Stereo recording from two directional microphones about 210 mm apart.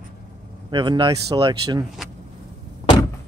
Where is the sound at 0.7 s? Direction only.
20° right (ahead or behind).